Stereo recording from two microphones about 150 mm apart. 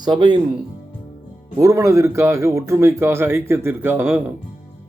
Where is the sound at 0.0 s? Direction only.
30° right (ahead or behind).